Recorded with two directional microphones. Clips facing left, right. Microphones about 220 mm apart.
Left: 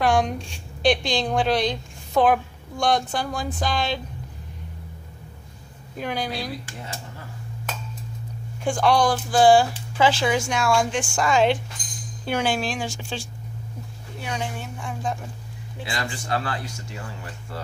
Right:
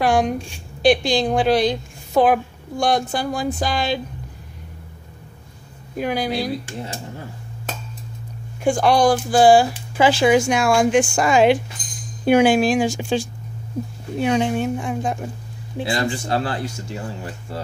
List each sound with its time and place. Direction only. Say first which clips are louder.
0.0 s a sound: right 3 dB; 5° right (ahead or behind)
0.8 s speech: right 5 dB; 5° right (ahead or behind)
5.9 s speech: right 6 dB; 10° right (ahead or behind)
6.8 s speech: right 6 dB; 30° right (ahead or behind)
8.8 s speech: right 3 dB; 10° right (ahead or behind)
15.8 s speech: right 9 dB; 35° right (ahead or behind)